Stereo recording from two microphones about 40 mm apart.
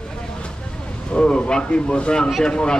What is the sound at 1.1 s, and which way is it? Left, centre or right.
Speech, left.